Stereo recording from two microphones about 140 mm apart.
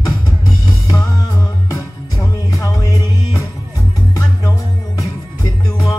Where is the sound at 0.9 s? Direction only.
25° left (ahead or behind).